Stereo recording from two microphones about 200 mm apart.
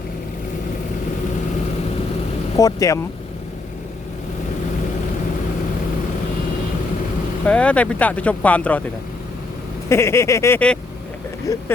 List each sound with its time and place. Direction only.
2.6 s speech: 15° left (ahead or behind)
7.4 s speech: 5° left (ahead or behind)
9.9 s speech: 15° left (ahead or behind)